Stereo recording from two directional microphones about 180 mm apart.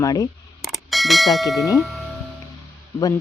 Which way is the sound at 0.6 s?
Centre (ahead or behind).